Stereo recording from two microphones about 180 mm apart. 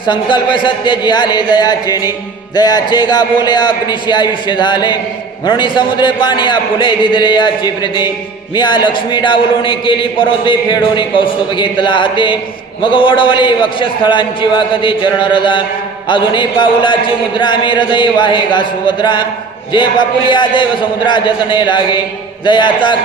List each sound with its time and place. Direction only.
0.0 s speech: 25° left (ahead or behind)